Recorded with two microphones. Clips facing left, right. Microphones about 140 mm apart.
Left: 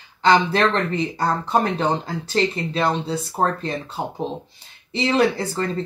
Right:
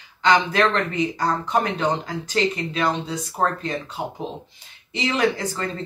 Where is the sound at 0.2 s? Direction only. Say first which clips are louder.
Left 2 dB; 30° left (ahead or behind).